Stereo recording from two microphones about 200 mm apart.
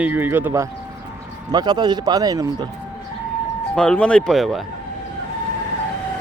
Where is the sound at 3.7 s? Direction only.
5° left (ahead or behind).